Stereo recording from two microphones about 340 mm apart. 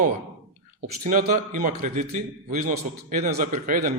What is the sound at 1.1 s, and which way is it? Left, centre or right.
A man's voice, right.